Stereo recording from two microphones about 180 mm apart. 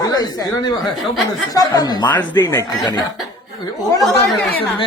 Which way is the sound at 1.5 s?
20° left (ahead or behind).